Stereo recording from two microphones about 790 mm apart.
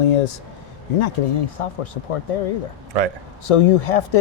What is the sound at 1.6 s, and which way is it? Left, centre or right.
Speech, left.